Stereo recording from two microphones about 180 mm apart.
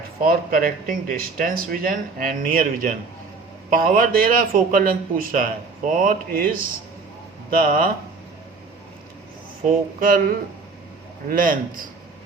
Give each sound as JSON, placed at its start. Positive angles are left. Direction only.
{"t": 0.2, "sound": "a man's voice", "side_deg": -50}
{"t": 10.0, "sound": "a man's voice", "side_deg": -50}